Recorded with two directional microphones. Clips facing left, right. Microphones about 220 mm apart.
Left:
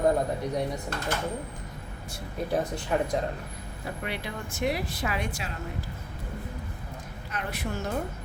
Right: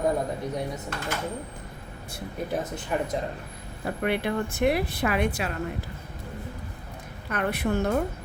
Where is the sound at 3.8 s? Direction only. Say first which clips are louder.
Right 8 dB; 55° right (ahead or behind).